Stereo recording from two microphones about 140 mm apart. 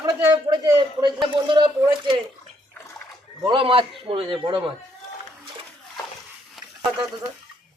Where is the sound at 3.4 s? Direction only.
35° right (ahead or behind).